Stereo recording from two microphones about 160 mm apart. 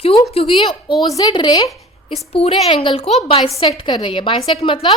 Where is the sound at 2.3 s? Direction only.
40° left (ahead or behind).